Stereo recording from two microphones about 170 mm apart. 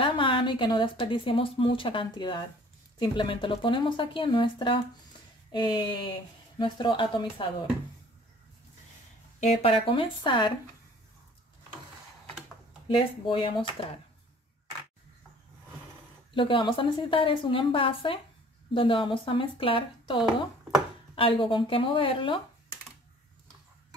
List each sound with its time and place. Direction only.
0.0 s speech: 30° left (ahead or behind)
9.4 s a woman's voice: 40° left (ahead or behind)
13.2 s a woman's voice: 30° left (ahead or behind)
16.3 s a woman's voice: 30° left (ahead or behind)